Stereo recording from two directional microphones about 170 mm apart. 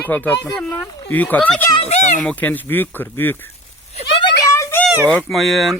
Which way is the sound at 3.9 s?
35° left (ahead or behind).